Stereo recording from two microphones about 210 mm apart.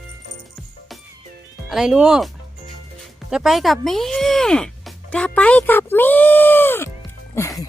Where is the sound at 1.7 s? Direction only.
Centre (ahead or behind).